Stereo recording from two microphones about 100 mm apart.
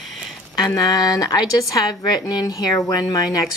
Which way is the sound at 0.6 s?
40° left (ahead or behind).